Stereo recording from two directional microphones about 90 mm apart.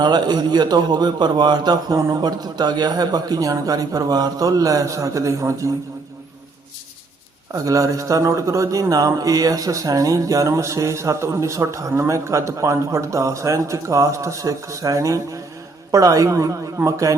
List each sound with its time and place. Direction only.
0.0 s a man's voice: 50° right (ahead or behind); by 5.7 s 35° right (ahead or behind)
7.5 s a man's voice: 40° right (ahead or behind)